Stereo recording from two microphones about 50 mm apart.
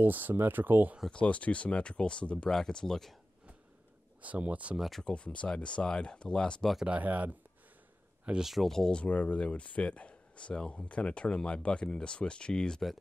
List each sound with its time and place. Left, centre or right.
0.0 s speech: right
1.1 s speech: left; by 3.2 s centre
4.2 s speech: right
4.7 s speech: centre
5.0 s speech: left
6.9 s speech: right
8.4 s speech: centre
8.6 s speech: centre
8.9 s speech: left